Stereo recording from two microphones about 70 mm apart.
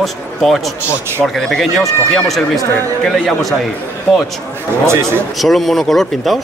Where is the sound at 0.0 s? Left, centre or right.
Centre.